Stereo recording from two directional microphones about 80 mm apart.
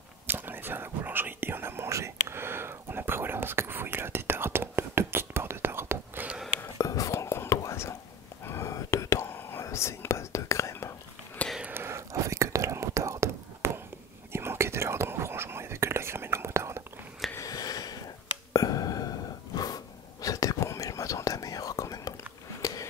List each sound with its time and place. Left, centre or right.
0.3 s whispering: right
6.8 s whispering: left
11.7 s whispering: right
17.4 s a sound: left
19.5 s whispering: left
22.6 s a sound: left